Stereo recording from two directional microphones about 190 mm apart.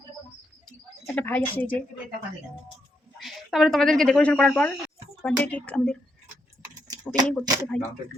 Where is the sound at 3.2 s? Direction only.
Centre (ahead or behind).